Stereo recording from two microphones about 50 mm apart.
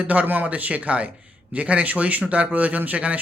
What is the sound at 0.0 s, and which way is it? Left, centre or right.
A man's voice, right.